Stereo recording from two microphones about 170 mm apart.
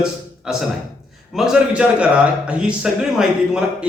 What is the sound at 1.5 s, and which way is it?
A man's voice, 5° right (ahead or behind).